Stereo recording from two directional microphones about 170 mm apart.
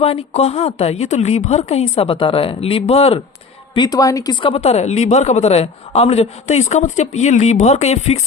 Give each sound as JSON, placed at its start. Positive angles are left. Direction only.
{"t": 0.0, "sound": "a woman's voice", "side_deg": 35}
{"t": 3.8, "sound": "a woman's voice", "side_deg": 20}